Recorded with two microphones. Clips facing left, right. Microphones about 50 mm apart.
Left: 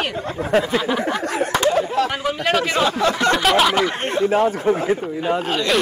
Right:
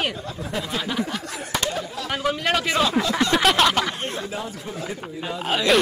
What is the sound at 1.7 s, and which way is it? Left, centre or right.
Chatter, left.